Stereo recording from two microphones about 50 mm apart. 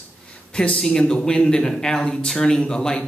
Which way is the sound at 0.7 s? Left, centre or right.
Centre.